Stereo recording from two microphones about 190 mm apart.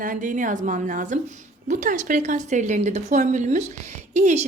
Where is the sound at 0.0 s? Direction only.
45° right (ahead or behind).